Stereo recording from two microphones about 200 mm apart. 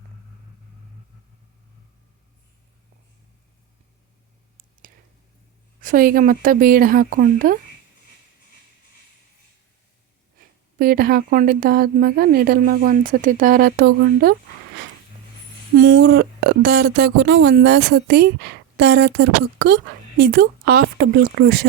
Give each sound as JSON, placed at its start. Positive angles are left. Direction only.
{"t": 5.8, "sound": "a woman's voice", "side_deg": -45}
{"t": 10.8, "sound": "a woman's voice", "side_deg": -45}
{"t": 15.7, "sound": "speech", "side_deg": -60}